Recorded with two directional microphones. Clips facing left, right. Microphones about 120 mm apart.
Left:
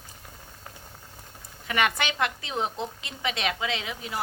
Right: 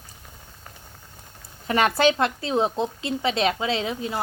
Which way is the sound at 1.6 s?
35° right (ahead or behind).